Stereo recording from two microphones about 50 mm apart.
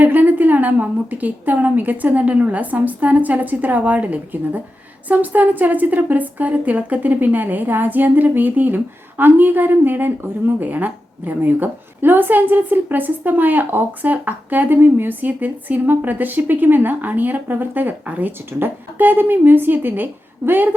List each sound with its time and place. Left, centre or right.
0.0 s a woman's voice: right